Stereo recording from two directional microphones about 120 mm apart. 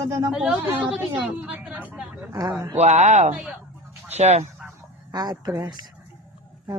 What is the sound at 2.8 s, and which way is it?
Speech, 75° right (ahead or behind).